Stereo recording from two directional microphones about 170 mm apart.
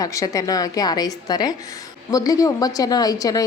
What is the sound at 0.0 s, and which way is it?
A woman's voice, 20° left (ahead or behind).